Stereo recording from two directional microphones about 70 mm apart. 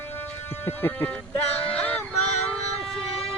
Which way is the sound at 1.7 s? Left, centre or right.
Centre.